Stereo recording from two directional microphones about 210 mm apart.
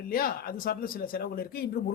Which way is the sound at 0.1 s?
45° left (ahead or behind).